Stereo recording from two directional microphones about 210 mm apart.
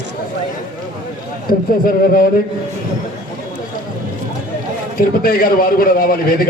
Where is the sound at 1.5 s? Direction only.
45° left (ahead or behind).